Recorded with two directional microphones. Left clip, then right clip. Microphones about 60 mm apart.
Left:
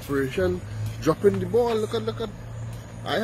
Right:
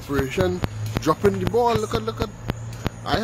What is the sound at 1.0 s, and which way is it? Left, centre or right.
Speech, right.